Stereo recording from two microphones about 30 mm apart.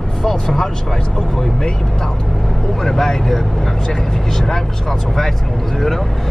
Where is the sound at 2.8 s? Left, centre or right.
Centre.